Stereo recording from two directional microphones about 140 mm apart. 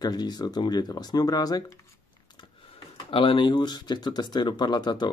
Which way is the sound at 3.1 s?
40° left (ahead or behind).